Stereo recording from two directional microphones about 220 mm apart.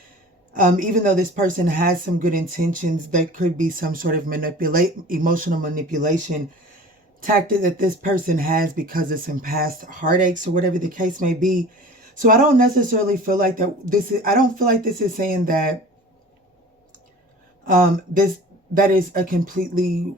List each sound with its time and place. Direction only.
0.5 s speech: 35° right (ahead or behind)
17.7 s speech: 40° right (ahead or behind)